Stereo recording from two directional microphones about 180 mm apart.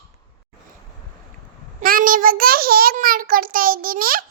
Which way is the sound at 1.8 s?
50° right (ahead or behind).